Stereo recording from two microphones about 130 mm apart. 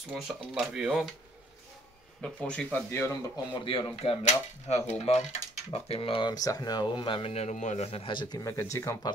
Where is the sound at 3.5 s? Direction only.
40° left (ahead or behind); by 9.0 s 25° left (ahead or behind).